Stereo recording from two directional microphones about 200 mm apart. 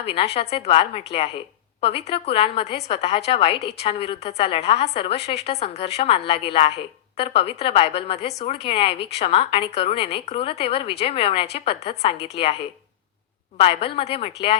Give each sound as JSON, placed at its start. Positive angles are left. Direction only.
{"t": 0.0, "sound": "a woman's voice", "side_deg": 30}